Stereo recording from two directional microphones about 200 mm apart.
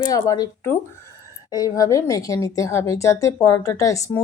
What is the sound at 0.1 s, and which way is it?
A woman's voice, 20° left (ahead or behind).